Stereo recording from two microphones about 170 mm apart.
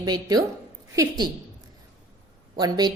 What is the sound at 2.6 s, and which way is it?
Speech, 25° right (ahead or behind).